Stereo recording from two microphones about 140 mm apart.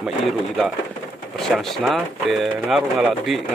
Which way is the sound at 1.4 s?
Centre (ahead or behind).